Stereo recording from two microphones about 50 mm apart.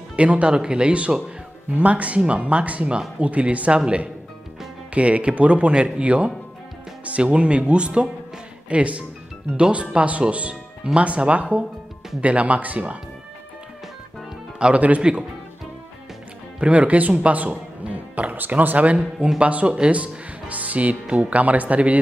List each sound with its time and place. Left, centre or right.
0.1 s speech: right
14.6 s speech: right
16.5 s speech: right
18.9 s speech: centre